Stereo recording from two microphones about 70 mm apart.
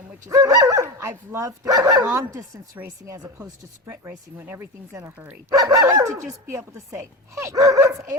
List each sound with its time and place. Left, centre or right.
0.3 s speech: right
0.8 s speech: right
3.8 s speech: right
5.1 s speech: right
5.5 s speech: right
5.8 s speech: right
7.5 s speech: right